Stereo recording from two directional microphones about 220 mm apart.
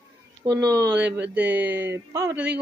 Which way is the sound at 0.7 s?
50° right (ahead or behind).